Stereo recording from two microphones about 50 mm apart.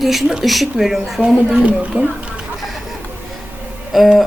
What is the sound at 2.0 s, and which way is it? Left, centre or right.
Speech, right.